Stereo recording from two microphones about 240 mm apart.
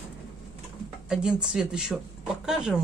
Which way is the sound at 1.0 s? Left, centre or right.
Centre.